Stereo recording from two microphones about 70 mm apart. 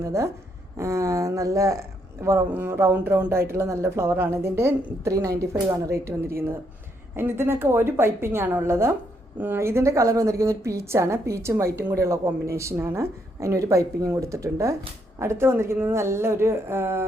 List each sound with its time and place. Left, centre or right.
0.0 s a woman's voice: right
2.5 s a woman's voice: right